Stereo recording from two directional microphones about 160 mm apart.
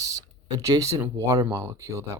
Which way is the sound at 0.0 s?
20° right (ahead or behind).